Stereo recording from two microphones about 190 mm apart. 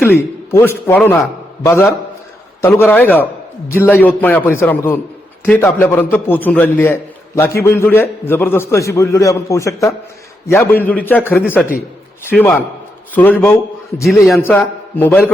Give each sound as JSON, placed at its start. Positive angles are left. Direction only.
{"t": 0.0, "sound": "a man's voice", "side_deg": 10}
{"t": 14.0, "sound": "a man's voice", "side_deg": 0}
{"t": 14.3, "sound": "a man's voice", "side_deg": 10}